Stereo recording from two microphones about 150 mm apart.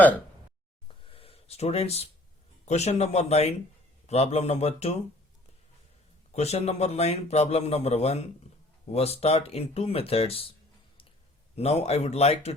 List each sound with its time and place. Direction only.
0.9 s a sound: 40° left (ahead or behind)
2.6 s a man's voice: 45° left (ahead or behind)
6.3 s a man's voice: 45° left (ahead or behind)
11.5 s a man's voice: 45° left (ahead or behind)